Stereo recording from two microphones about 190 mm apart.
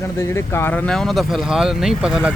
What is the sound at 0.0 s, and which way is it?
Speech, 15° left (ahead or behind).